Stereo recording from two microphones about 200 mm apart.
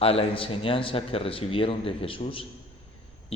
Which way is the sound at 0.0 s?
30° left (ahead or behind).